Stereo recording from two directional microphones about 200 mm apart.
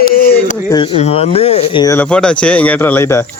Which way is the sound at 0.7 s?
25° left (ahead or behind).